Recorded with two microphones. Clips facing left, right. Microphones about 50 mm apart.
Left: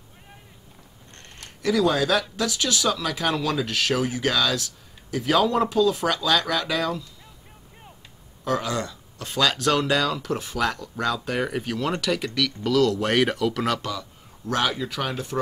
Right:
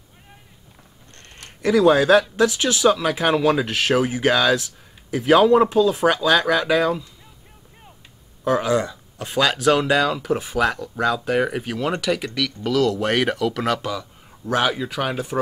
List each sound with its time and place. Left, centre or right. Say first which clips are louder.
1.6 s speech: right 6 dB; right
8.5 s speech: right 6 dB; centre